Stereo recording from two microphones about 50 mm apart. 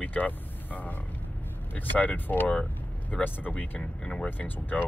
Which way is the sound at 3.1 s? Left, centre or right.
Centre.